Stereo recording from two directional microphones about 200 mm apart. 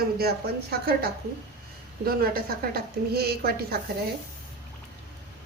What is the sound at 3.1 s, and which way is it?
Speech, 50° right (ahead or behind).